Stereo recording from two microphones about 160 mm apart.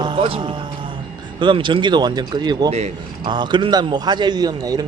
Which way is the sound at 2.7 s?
45° right (ahead or behind).